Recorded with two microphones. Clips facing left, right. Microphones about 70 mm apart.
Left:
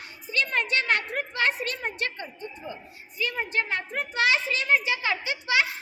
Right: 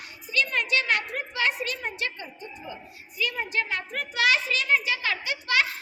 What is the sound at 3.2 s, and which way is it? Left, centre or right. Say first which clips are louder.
A woman's voice: even; left.